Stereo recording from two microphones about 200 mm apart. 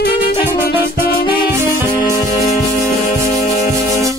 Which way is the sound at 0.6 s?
50° left (ahead or behind).